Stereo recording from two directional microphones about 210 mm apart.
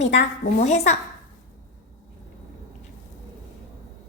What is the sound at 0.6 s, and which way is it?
Speech, 30° left (ahead or behind).